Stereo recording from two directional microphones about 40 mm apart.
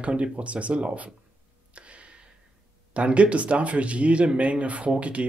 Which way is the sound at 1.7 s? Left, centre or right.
Right.